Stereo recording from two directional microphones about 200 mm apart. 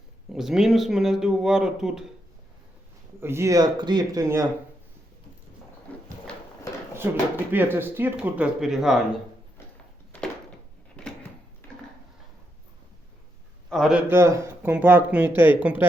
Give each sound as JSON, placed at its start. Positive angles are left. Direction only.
{"t": 0.3, "sound": "speech", "side_deg": 0}
{"t": 3.2, "sound": "a man's voice", "side_deg": -10}
{"t": 7.5, "sound": "a man's voice", "side_deg": -10}
{"t": 10.9, "sound": "a sound", "side_deg": 5}
{"t": 13.7, "sound": "a man's voice", "side_deg": 0}